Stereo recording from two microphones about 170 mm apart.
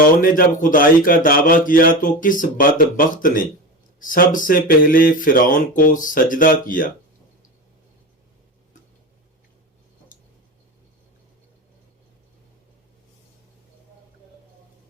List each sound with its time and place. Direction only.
0.2 s speech: 55° left (ahead or behind)